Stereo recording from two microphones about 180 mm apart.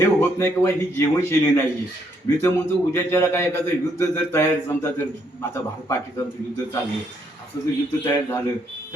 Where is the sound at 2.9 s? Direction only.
15° left (ahead or behind).